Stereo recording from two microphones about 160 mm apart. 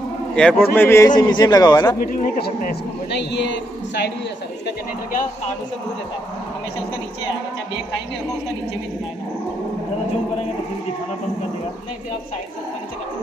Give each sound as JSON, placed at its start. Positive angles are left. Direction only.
{"t": 0.4, "sound": "a man's voice", "side_deg": 5}
{"t": 2.0, "sound": "a man's voice", "side_deg": 60}